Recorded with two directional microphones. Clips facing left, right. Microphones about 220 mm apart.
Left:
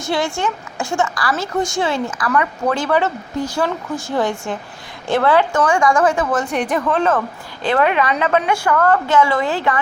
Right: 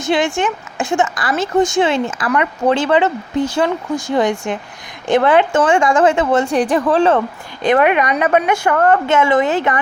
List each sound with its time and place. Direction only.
0.0 s a woman's voice: 20° right (ahead or behind)
7.6 s a woman's voice: 15° right (ahead or behind)